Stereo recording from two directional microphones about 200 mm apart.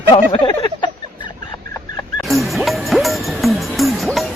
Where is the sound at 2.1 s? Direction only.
Centre (ahead or behind).